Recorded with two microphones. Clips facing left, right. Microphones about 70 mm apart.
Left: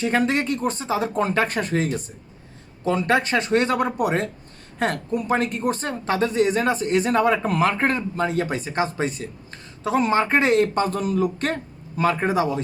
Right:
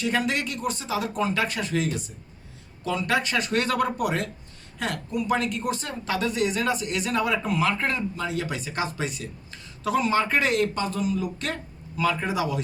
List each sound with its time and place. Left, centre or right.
0.0 s a woman's voice: left